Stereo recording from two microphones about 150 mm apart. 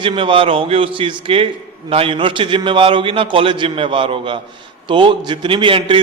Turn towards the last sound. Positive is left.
turn(degrees=-35)  # may be behind; listen again after turning